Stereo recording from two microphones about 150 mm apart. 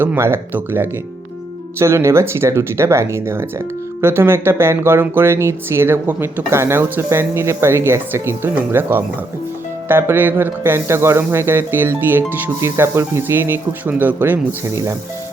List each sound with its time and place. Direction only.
0.0 s speech: 15° right (ahead or behind)